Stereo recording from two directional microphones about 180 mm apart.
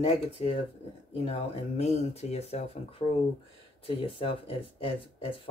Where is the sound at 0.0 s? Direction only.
30° left (ahead or behind).